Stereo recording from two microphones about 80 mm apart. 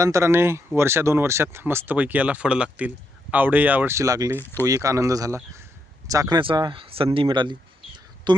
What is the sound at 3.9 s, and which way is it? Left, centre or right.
Speech, right.